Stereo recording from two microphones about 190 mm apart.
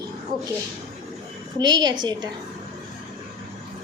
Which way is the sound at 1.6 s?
20° right (ahead or behind).